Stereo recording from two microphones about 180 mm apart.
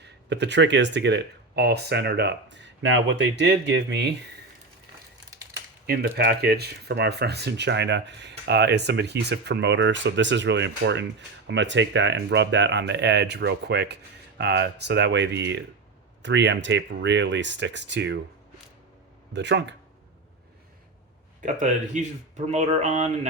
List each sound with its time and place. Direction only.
0.0 s speech: 70° right (ahead or behind)
5.8 s speech: 60° right (ahead or behind)
19.3 s speech: 75° right (ahead or behind)
21.4 s speech: 40° right (ahead or behind)